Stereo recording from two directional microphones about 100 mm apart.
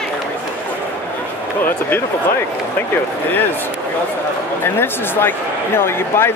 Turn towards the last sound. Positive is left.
turn(degrees=25)  # may be behind; listen again after turning